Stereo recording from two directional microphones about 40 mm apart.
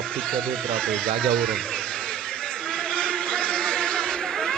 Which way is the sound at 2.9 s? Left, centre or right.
Left.